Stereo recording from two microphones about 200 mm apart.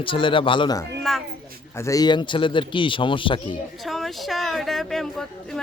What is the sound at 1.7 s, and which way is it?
A man's voice, 15° left (ahead or behind).